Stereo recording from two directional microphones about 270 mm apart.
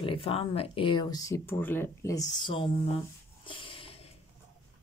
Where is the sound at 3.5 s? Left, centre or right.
Centre.